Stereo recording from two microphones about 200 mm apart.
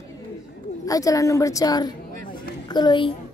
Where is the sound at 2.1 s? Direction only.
45° right (ahead or behind).